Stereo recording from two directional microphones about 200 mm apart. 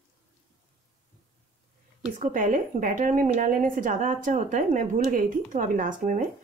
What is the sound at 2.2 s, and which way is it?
A woman's voice, 40° right (ahead or behind).